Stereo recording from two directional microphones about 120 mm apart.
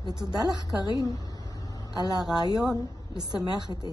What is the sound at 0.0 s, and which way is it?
Speech, 35° right (ahead or behind).